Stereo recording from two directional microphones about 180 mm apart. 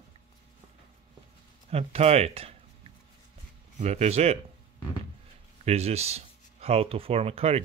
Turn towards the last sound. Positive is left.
turn(degrees=-35)  # may be behind; listen again after turning